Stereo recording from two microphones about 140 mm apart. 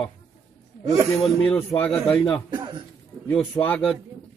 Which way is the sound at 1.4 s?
15° left (ahead or behind).